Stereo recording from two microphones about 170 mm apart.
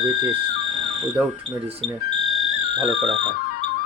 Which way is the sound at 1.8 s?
5° left (ahead or behind).